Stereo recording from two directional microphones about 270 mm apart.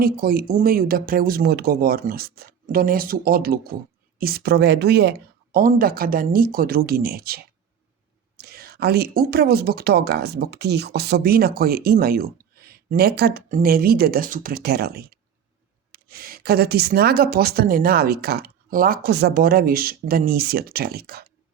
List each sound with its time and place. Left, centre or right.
0.0 s speech: right